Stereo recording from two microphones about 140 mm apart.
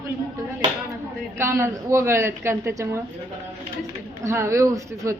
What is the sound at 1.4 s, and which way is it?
A woman's voice, 20° right (ahead or behind).